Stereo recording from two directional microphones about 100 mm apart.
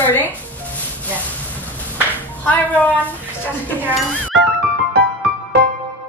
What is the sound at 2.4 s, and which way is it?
Speech, 15° left (ahead or behind).